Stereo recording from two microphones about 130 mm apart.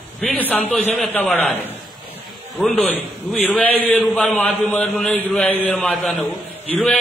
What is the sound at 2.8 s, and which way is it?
A man's voice, centre (ahead or behind).